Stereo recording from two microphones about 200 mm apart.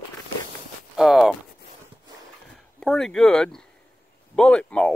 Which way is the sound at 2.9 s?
Centre (ahead or behind).